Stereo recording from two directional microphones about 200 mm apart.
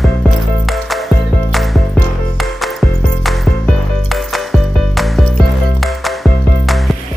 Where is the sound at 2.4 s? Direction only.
Centre (ahead or behind).